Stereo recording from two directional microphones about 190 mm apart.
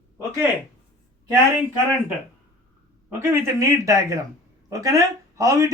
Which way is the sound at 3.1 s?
15° right (ahead or behind).